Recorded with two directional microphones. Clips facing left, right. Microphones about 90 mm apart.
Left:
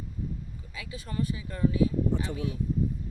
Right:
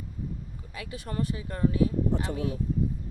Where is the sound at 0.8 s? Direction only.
50° right (ahead or behind).